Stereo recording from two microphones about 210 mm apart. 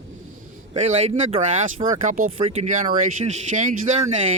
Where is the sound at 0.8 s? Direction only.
30° right (ahead or behind).